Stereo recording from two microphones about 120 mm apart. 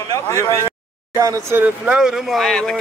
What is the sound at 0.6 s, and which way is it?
Speech, 20° right (ahead or behind).